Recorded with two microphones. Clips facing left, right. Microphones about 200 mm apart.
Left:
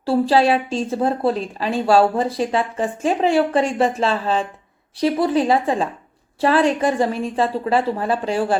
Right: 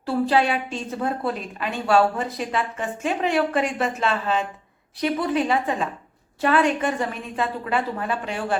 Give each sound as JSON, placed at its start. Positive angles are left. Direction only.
{"t": 0.0, "sound": "a woman's voice", "side_deg": 30}